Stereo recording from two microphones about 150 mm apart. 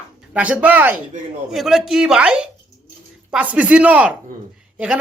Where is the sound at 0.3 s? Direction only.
10° right (ahead or behind).